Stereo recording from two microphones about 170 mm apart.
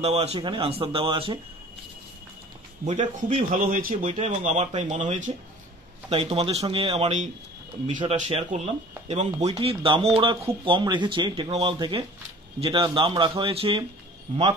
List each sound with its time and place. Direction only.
0.0 s speech: 35° right (ahead or behind)
2.8 s a man's voice: 45° right (ahead or behind)
4.0 s speech: 40° right (ahead or behind)